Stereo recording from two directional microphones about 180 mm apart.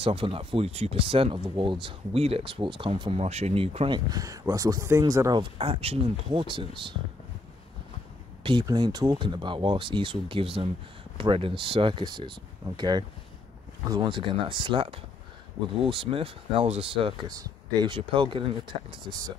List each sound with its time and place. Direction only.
0.0 s speech: 30° right (ahead or behind)
8.5 s speech: 25° right (ahead or behind)